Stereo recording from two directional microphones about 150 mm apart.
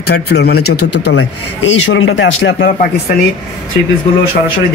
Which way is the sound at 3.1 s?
65° left (ahead or behind).